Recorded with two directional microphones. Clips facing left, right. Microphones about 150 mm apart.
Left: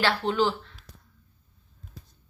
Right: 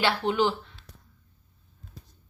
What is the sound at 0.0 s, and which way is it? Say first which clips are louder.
Speech: even; 15° right (ahead or behind).